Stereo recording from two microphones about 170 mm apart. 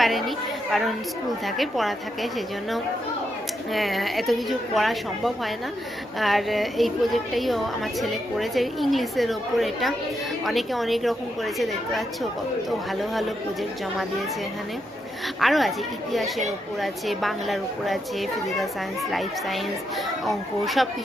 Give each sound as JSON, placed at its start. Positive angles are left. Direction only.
{"t": 0.0, "sound": "a woman's voice", "side_deg": 0}
{"t": 15.4, "sound": "a woman's voice", "side_deg": 0}
{"t": 16.8, "sound": "a woman's voice", "side_deg": 0}